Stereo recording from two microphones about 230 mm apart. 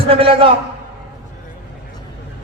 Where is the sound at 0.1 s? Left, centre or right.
Right.